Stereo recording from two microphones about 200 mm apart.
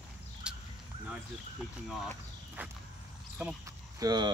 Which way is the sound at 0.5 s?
5° right (ahead or behind).